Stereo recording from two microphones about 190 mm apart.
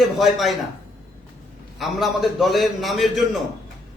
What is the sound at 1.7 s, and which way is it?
A man's voice, centre (ahead or behind).